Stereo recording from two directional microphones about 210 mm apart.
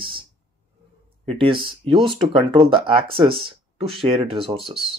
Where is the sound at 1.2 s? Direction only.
25° right (ahead or behind).